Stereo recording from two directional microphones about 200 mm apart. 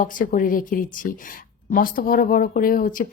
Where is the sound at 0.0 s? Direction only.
40° left (ahead or behind).